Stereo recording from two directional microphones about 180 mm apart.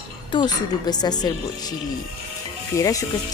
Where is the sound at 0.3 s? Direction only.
25° left (ahead or behind).